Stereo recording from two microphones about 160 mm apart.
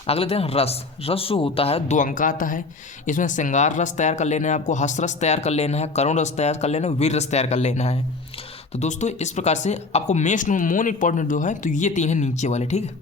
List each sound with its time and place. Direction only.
0.1 s a man's voice: 40° left (ahead or behind)
2.0 s speech: 55° left (ahead or behind)